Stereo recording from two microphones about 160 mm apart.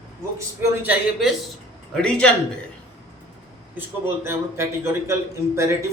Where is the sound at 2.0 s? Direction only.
5° left (ahead or behind).